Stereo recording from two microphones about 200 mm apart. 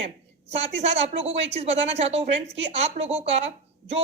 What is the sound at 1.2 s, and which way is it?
Speech, 65° right (ahead or behind).